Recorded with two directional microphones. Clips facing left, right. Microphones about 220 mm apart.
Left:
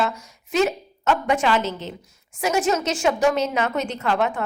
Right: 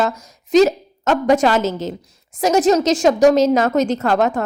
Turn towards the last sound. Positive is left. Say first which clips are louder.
# right 6 dB
turn(degrees=-40)  # may be behind; listen again after turning